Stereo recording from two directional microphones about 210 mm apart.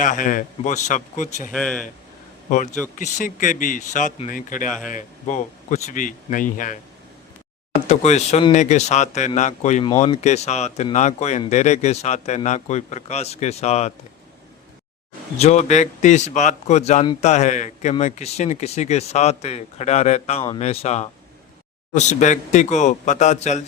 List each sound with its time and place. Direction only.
0.0 s speech: 40° left (ahead or behind)
1.5 s speech: 5° left (ahead or behind)
3.0 s speech: 35° left (ahead or behind)
4.7 s speech: centre (ahead or behind)
4.9 s speech: 35° left (ahead or behind)
7.9 s speech: 35° left (ahead or behind)
15.4 s speech: 30° left (ahead or behind)